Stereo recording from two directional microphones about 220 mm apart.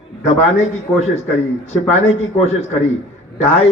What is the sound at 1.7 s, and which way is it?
A man's voice, 30° left (ahead or behind).